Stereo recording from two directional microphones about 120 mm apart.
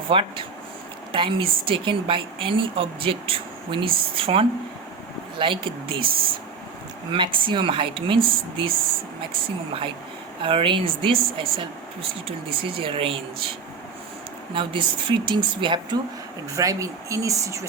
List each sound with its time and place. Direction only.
0.1 s a woman's voice: 45° right (ahead or behind)
7.1 s a woman's voice: 45° right (ahead or behind)
10.4 s a woman's voice: 45° right (ahead or behind)
14.5 s a woman's voice: 45° right (ahead or behind)
16.6 s speech: 25° right (ahead or behind)